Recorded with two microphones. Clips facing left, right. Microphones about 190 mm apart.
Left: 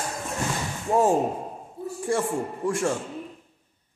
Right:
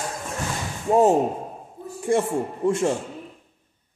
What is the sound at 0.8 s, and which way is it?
Speech, 20° right (ahead or behind).